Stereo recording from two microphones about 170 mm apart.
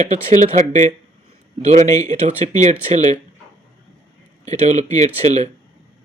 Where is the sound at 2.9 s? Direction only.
40° right (ahead or behind).